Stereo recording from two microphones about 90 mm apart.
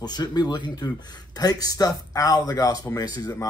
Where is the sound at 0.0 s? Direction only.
50° left (ahead or behind).